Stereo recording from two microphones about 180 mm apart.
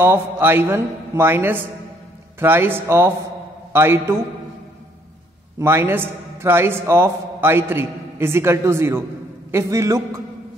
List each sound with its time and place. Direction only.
0.0 s a man's voice: 15° right (ahead or behind)
3.7 s a man's voice: 15° right (ahead or behind)
5.6 s a man's voice: 10° right (ahead or behind)